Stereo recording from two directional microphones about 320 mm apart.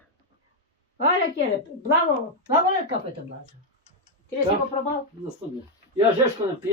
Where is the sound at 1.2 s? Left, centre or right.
Left.